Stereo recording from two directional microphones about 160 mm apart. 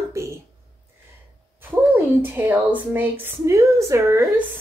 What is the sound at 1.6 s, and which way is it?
Speech, 10° right (ahead or behind).